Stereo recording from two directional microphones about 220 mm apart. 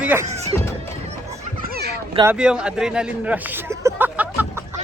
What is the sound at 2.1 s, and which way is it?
Speech, 15° right (ahead or behind).